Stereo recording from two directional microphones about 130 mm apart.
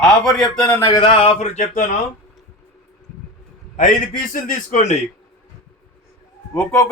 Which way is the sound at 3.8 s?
90° left.